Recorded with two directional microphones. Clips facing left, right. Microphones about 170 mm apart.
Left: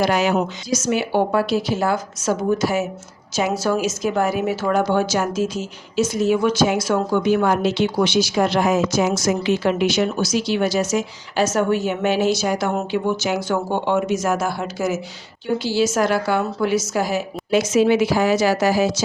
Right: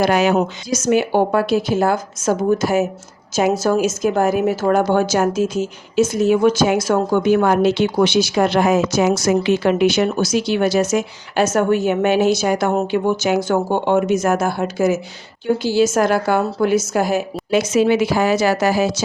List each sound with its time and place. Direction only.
0.0 s a woman's voice: 60° right (ahead or behind)